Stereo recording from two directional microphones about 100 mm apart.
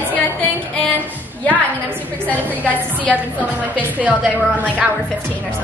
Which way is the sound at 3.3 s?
15° right (ahead or behind).